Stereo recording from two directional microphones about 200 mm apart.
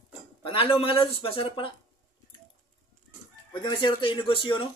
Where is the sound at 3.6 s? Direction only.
25° left (ahead or behind).